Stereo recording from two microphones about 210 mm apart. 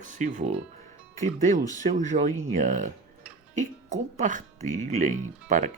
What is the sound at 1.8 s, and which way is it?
Speech, 35° right (ahead or behind).